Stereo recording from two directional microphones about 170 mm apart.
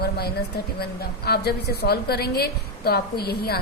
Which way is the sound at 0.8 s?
70° left (ahead or behind).